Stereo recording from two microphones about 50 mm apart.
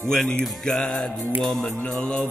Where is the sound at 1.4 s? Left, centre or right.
Centre.